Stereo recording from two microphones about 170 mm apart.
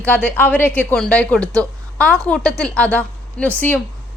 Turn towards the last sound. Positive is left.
turn(degrees=10)  # may be behind; listen again after turning